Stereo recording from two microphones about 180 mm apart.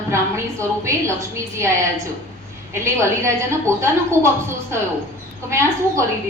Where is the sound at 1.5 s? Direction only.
15° right (ahead or behind).